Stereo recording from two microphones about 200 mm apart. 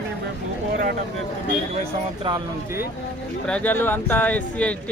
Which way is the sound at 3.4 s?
5° left (ahead or behind).